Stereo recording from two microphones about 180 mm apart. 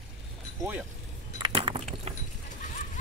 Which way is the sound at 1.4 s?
30° right (ahead or behind).